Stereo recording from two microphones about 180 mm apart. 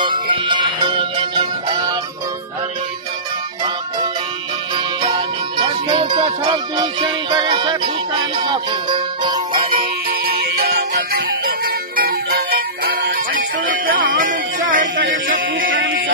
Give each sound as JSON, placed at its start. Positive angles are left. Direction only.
{"t": 0.0, "sound": "music", "side_deg": -25}
{"t": 4.7, "sound": "music", "side_deg": -25}
{"t": 10.0, "sound": "music", "side_deg": -60}